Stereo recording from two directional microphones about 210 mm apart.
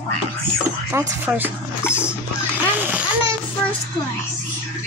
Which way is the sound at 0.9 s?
10° right (ahead or behind).